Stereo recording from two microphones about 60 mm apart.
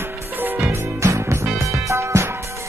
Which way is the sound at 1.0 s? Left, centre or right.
Right.